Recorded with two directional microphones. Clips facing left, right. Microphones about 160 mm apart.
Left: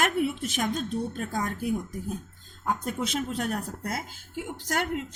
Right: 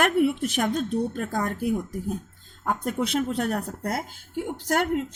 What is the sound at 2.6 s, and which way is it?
A woman's voice, 55° right (ahead or behind).